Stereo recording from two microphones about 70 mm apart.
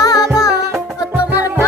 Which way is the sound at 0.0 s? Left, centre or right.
Left.